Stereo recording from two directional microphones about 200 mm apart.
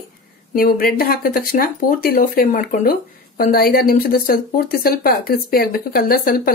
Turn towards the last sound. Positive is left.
turn(degrees=45)  # may be behind; listen again after turning